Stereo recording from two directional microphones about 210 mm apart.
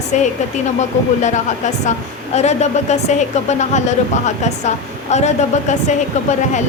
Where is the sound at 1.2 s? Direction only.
35° left (ahead or behind).